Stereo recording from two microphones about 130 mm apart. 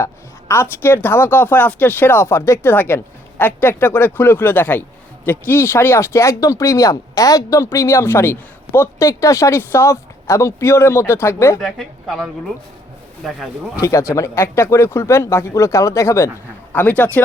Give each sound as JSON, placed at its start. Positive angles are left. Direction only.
{"t": 0.0, "sound": "speech", "side_deg": 20}
{"t": 11.6, "sound": "a woman's voice", "side_deg": 0}
{"t": 14.1, "sound": "speech", "side_deg": 20}